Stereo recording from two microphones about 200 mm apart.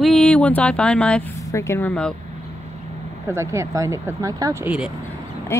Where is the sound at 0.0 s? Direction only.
5° left (ahead or behind).